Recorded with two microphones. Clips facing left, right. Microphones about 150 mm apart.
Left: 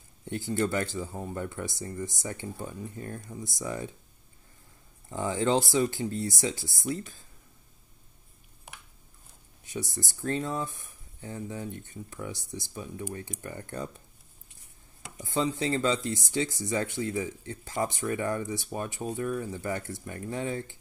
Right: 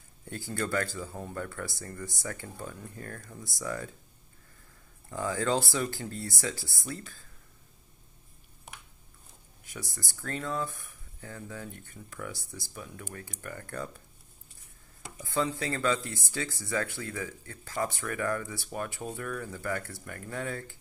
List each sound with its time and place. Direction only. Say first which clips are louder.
0.2 s speech: left 6 dB; 20° left (ahead or behind)
5.1 s speech: left 3 dB; 20° left (ahead or behind)
9.7 s speech: left 7 dB; 20° left (ahead or behind)
15.2 s speech: left 2 dB; 20° left (ahead or behind)